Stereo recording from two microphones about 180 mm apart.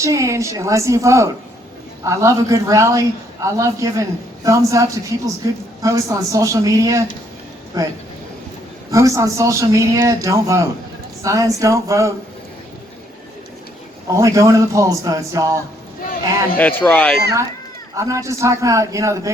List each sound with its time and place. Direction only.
0.0 s a man's voice: 15° right (ahead or behind)
14.1 s a man's voice: 15° right (ahead or behind)
16.6 s speech: 10° left (ahead or behind)
17.9 s a man's voice: 15° right (ahead or behind)